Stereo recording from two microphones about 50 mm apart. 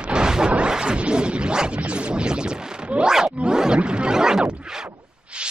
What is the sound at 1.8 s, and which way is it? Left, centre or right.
Speech, right.